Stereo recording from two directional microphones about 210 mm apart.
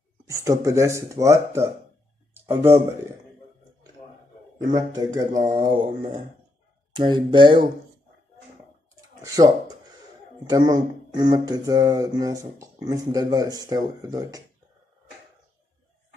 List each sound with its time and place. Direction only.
0.3 s speech: 15° right (ahead or behind)
4.7 s speech: 20° right (ahead or behind)
6.9 s speech: 20° right (ahead or behind)
9.2 s speech: 15° right (ahead or behind)
10.5 s speech: 20° right (ahead or behind)